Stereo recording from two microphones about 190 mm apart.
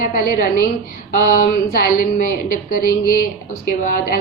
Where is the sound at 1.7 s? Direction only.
50° left (ahead or behind).